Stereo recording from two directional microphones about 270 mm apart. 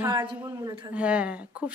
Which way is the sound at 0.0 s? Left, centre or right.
Centre.